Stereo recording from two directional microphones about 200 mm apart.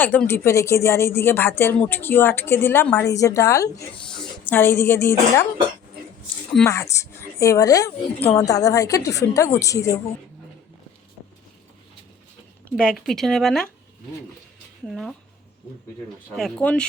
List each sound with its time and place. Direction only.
0.0 s a woman's voice: 10° left (ahead or behind)
3.9 s a woman's voice: 5° left (ahead or behind)
6.7 s a woman's voice: 15° left (ahead or behind)
12.7 s speech: 5° left (ahead or behind)
14.8 s speech: centre (ahead or behind)
16.3 s speech: 5° left (ahead or behind)